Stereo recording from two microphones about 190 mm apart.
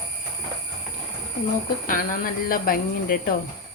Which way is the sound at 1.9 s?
45° left (ahead or behind).